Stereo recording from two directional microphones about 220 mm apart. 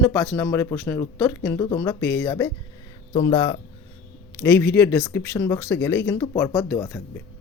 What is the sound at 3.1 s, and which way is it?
Speech, 20° left (ahead or behind).